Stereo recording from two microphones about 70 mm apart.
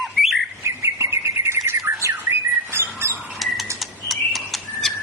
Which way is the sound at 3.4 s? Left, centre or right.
Centre.